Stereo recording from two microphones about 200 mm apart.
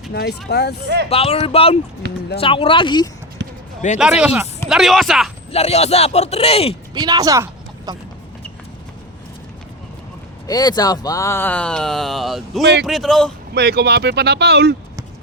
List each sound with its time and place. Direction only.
0.1 s speech: 55° left (ahead or behind)
1.1 s speech: 30° left (ahead or behind)
2.0 s speech: 55° right (ahead or behind)
2.4 s speech: 25° left (ahead or behind)
3.4 s basketball bounce: 60° right (ahead or behind)
3.8 s a man's voice: 40° left (ahead or behind)
4.2 s speech: 5° right (ahead or behind)
5.5 s a man's voice: 30° left (ahead or behind)
6.9 s a woman's voice: 20° right (ahead or behind)
10.4 s speech: 20° left (ahead or behind); by 13.3 s centre (ahead or behind)
13.5 s speech: 55° right (ahead or behind)